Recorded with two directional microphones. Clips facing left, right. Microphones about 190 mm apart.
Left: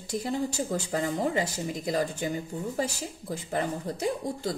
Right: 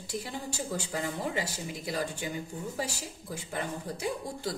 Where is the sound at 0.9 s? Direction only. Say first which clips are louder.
Left 6 dB; 45° left (ahead or behind).